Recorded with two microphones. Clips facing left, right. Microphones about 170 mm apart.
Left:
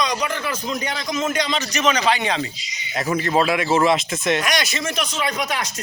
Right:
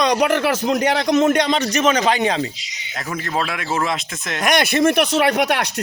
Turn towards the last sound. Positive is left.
turn(degrees=-65)  # may be behind; listen again after turning